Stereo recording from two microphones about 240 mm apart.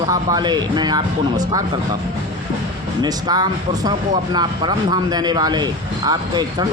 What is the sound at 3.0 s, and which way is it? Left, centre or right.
Speech, centre.